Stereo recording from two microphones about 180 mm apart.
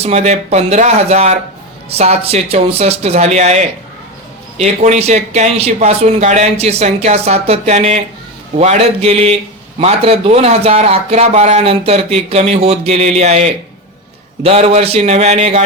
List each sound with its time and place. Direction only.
0.0 s speech: 40° right (ahead or behind)